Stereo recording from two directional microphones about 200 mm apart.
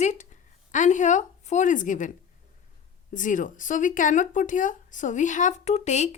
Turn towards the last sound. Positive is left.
turn(degrees=35)  # may be behind; listen again after turning